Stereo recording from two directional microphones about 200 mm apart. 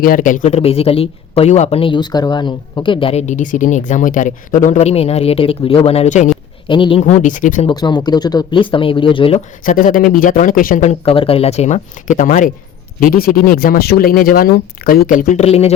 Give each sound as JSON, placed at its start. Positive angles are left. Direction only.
{"t": 0.0, "sound": "a man's voice", "side_deg": 45}
{"t": 6.7, "sound": "speech", "side_deg": 25}
{"t": 7.0, "sound": "a man's voice", "side_deg": 40}
{"t": 7.7, "sound": "speech", "side_deg": 20}
{"t": 9.6, "sound": "a man's voice", "side_deg": 45}